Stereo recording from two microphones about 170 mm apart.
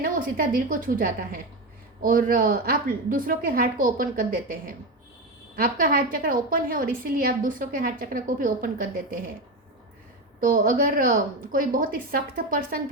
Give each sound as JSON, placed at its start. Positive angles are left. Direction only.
{"t": 0.0, "sound": "a woman's voice", "side_deg": -55}
{"t": 10.4, "sound": "a woman's voice", "side_deg": -55}